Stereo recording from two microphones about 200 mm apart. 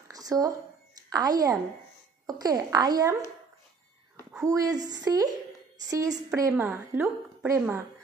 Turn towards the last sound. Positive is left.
turn(degrees=-10)  # may be behind; listen again after turning